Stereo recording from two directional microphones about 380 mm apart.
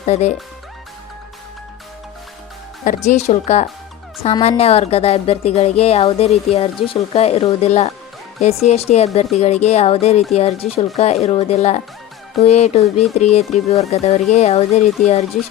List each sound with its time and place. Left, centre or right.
0.0 s a woman's voice: centre
2.8 s a woman's voice: centre